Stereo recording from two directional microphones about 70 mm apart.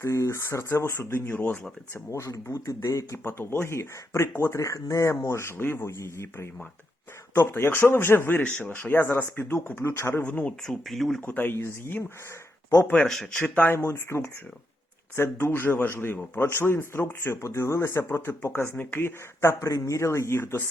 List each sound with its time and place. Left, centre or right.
0.0 s speech: left
2.0 s speech: left
10.2 s speech: left
10.6 s speech: centre
11.2 s speech: left
13.7 s speech: left
17.4 s speech: left
19.6 s speech: left